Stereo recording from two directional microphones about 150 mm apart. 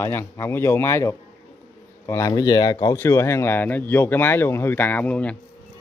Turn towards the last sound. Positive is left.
turn(degrees=10)  # may be behind; listen again after turning